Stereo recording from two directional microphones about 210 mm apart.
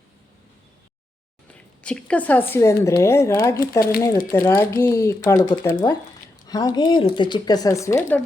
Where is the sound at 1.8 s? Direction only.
5° left (ahead or behind).